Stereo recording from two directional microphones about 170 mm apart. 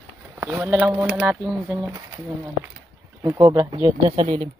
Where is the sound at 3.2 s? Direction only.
20° right (ahead or behind).